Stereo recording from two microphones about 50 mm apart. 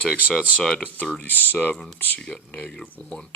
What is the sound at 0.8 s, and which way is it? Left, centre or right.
Speech, left.